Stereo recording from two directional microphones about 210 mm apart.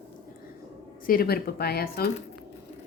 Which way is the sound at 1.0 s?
45° left (ahead or behind).